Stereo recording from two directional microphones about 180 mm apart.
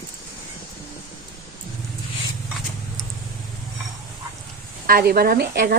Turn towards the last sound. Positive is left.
turn(degrees=-60)  # may be behind; listen again after turning